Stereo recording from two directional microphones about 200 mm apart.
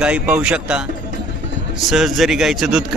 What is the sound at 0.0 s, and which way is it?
Speech, 5° right (ahead or behind).